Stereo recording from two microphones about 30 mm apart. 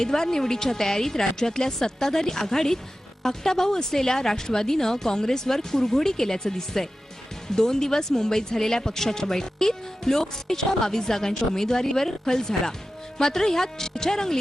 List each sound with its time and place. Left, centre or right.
0.0 s speech: centre